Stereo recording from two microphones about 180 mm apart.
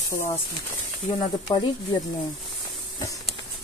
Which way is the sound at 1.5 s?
25° left (ahead or behind).